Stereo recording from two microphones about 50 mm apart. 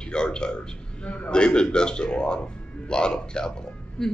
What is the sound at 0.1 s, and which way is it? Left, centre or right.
A man's voice, centre.